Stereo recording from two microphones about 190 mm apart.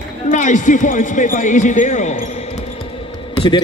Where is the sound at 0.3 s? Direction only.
40° left (ahead or behind).